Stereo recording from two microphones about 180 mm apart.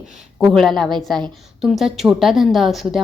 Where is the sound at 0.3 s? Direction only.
Centre (ahead or behind).